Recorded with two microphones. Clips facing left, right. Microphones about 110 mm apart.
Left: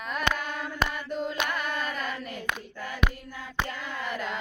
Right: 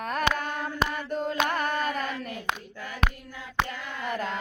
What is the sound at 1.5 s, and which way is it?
Carnatic music, 45° right (ahead or behind).